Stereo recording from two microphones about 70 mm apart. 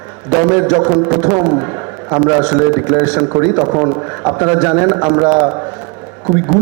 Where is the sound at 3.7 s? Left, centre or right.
Right.